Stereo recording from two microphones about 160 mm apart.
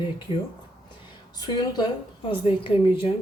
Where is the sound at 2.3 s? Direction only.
30° left (ahead or behind).